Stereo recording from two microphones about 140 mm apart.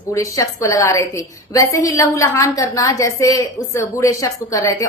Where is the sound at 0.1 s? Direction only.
20° left (ahead or behind).